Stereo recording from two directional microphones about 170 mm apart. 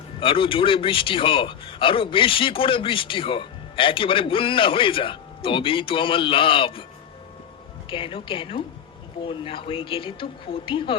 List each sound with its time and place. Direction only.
0.2 s a man's voice: 30° left (ahead or behind)
7.9 s a man's voice: 30° left (ahead or behind)